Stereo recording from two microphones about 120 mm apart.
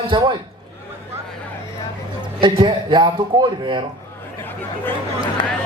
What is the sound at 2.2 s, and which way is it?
Speech, 45° right (ahead or behind).